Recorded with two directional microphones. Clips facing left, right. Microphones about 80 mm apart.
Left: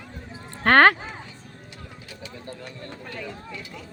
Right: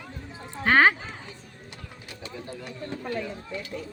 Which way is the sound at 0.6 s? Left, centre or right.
Left.